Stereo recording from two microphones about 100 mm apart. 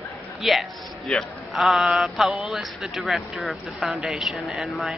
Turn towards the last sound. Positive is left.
turn(degrees=0)  # may be behind; listen again after turning